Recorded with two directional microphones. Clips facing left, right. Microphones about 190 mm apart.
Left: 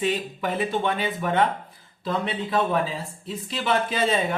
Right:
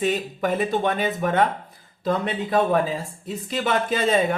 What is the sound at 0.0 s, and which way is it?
Speech, 45° right (ahead or behind).